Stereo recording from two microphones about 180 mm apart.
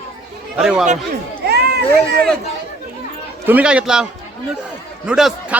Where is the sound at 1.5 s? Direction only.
65° right (ahead or behind).